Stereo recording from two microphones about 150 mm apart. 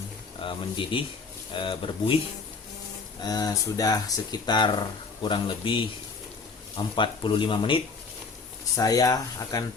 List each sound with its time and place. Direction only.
0.3 s speech: 35° left (ahead or behind)
3.2 s speech: 25° left (ahead or behind)
8.7 s speech: 25° left (ahead or behind)